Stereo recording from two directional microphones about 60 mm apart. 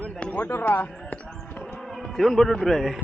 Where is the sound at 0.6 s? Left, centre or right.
Left.